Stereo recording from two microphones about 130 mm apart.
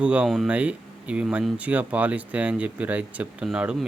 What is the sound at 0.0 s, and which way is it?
Speech, 10° right (ahead or behind).